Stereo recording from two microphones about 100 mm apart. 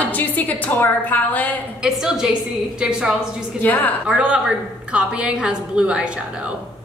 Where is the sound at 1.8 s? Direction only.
5° right (ahead or behind).